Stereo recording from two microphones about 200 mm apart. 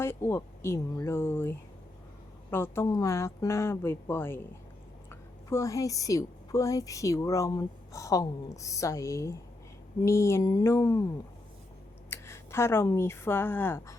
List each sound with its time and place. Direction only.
0.0 s a woman's voice: 10° left (ahead or behind)
5.5 s a woman's voice: 15° left (ahead or behind)
12.1 s speech: 15° left (ahead or behind)